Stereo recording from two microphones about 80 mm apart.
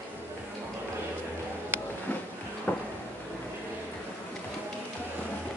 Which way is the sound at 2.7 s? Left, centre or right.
Centre.